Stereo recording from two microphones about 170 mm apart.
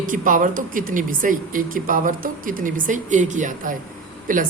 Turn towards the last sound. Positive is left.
turn(degrees=-55)  # may be behind; listen again after turning